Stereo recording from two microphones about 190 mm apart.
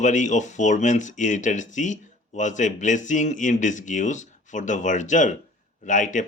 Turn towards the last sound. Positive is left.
turn(degrees=40)  # may be behind; listen again after turning